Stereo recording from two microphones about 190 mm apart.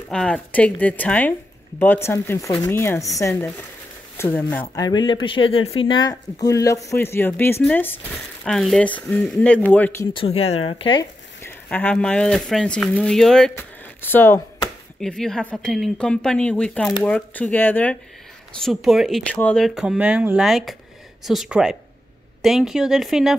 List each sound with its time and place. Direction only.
0.1 s speech: 5° left (ahead or behind)
4.8 s speech: 25° left (ahead or behind)
10.1 s speech: 30° left (ahead or behind)
11.4 s speech: 10° left (ahead or behind)